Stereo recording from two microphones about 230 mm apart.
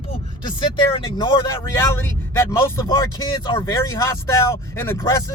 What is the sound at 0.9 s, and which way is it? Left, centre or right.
Speech, left.